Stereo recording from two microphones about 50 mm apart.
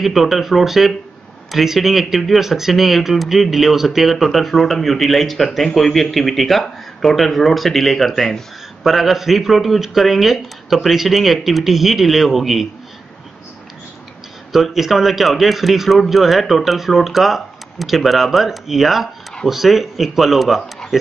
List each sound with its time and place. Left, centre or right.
0.0 s speech: centre
14.5 s speech: centre